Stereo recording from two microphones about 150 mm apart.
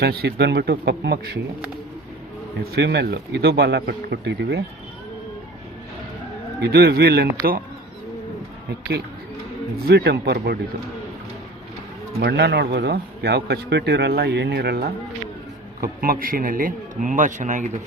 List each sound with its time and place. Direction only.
0.0 s speech: 90° right
2.7 s speech: 90° right
6.6 s speech: 90° right
9.8 s speech: 90° right
12.7 s speech: 90° right
15.8 s a man's voice: 75° right (ahead or behind); by 17.7 s 55° right (ahead or behind)